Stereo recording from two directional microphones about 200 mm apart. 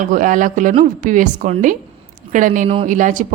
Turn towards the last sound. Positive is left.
turn(degrees=-40)  # may be behind; listen again after turning